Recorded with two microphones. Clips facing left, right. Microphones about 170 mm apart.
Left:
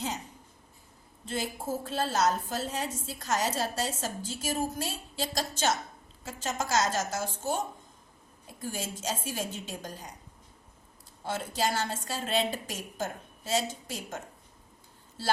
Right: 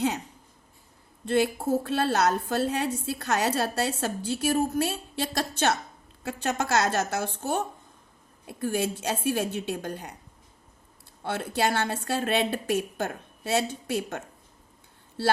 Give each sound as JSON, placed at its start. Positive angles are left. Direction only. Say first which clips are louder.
{"t": 1.2, "sound": "a woman's voice", "louder": "right 10 dB", "side_deg": -65}
{"t": 11.2, "sound": "a woman's voice", "louder": "right 4 dB", "side_deg": -60}
{"t": 15.2, "sound": "speech", "louder": "right 5 dB", "side_deg": -60}